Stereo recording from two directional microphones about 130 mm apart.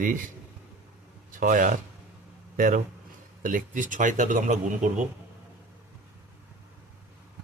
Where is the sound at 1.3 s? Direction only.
90° right.